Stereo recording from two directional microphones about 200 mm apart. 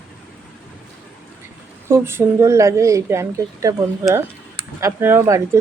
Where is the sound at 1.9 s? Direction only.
15° right (ahead or behind).